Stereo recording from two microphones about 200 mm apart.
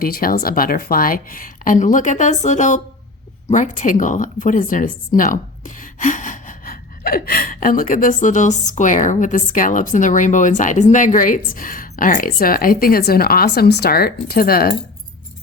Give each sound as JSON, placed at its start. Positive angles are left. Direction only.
{"t": 0.0, "sound": "a woman's voice", "side_deg": 45}